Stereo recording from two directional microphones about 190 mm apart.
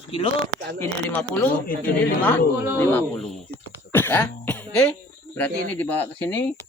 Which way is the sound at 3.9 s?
10° left (ahead or behind).